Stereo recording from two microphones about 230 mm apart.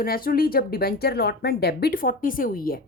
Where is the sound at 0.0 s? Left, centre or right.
Left.